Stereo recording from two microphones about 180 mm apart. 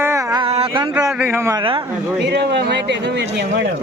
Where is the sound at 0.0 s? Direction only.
15° right (ahead or behind).